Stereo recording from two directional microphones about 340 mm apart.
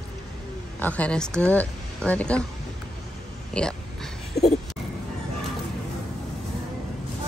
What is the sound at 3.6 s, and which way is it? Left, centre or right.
Speech, centre.